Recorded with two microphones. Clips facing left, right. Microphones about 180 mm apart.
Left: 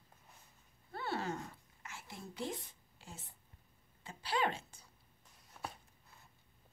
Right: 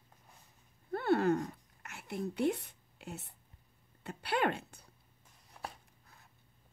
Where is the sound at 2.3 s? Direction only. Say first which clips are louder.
Right 9 dB; 65° right (ahead or behind).